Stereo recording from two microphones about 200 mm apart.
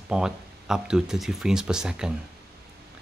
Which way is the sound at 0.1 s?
5° right (ahead or behind).